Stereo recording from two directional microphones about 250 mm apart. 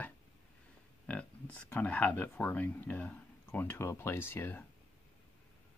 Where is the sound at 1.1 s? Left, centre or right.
Centre.